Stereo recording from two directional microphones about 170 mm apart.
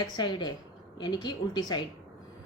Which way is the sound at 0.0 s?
25° left (ahead or behind).